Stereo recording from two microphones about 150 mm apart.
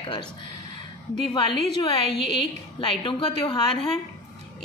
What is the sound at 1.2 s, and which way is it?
A woman's voice, 35° left (ahead or behind).